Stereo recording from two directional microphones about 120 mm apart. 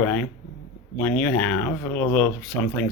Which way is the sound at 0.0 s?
15° left (ahead or behind).